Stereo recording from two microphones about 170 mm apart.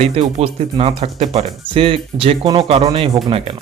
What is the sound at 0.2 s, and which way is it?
Speech, 35° right (ahead or behind).